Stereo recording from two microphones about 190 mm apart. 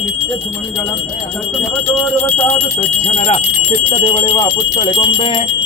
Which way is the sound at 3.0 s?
35° left (ahead or behind).